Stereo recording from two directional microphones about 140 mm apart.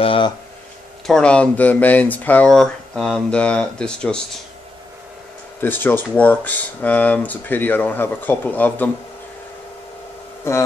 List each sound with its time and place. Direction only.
0.0 s speech: 40° left (ahead or behind)
1.0 s speech: 5° left (ahead or behind)
5.6 s speech: 15° left (ahead or behind)
10.5 s a man's voice: 20° left (ahead or behind)